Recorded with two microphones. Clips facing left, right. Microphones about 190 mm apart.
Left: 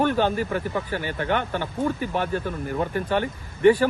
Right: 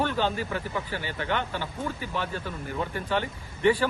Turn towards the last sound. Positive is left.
turn(degrees=50)  # may be behind; listen again after turning